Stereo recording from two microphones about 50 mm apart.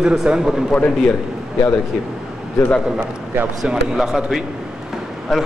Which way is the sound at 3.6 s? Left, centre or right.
Centre.